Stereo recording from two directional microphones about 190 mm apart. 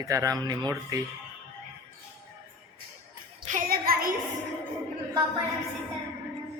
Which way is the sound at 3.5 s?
45° right (ahead or behind).